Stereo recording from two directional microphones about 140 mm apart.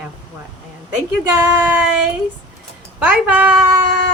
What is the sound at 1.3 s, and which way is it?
Speech, 25° right (ahead or behind).